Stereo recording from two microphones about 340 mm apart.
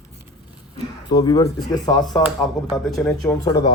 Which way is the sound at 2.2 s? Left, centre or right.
Centre.